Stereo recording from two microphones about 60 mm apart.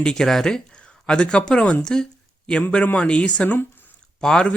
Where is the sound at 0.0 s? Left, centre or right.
Centre.